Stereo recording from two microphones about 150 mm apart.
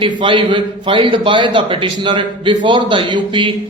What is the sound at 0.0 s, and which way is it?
A man's voice, 35° right (ahead or behind).